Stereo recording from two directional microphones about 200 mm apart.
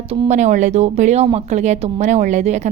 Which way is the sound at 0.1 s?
30° right (ahead or behind).